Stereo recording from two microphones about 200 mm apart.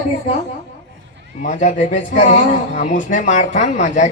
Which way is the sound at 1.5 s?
40° left (ahead or behind).